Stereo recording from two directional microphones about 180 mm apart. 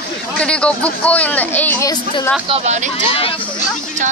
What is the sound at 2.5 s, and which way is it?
Speech, 40° right (ahead or behind).